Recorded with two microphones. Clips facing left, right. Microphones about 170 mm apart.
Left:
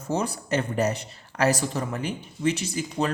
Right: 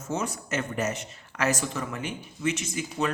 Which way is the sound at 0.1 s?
35° left (ahead or behind).